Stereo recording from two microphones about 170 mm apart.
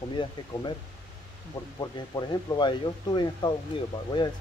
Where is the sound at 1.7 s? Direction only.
25° left (ahead or behind).